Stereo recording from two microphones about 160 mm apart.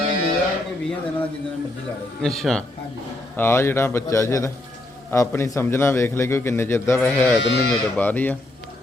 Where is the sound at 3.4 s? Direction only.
15° left (ahead or behind).